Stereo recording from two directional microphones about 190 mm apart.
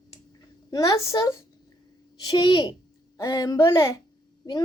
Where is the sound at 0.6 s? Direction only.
20° left (ahead or behind).